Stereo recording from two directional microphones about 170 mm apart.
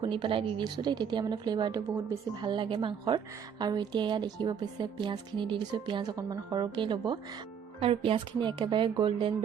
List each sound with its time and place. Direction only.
0.0 s speech: 30° right (ahead or behind)